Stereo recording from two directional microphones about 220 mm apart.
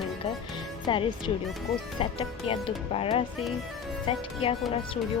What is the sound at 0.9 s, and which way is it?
Speech, 20° left (ahead or behind).